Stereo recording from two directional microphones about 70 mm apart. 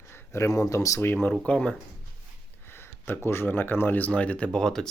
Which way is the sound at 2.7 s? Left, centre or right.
Left.